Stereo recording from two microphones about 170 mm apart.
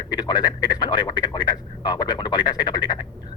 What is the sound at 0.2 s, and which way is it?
Speech, 25° left (ahead or behind).